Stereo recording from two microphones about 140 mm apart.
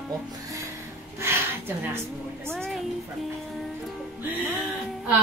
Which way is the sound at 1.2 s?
20° right (ahead or behind).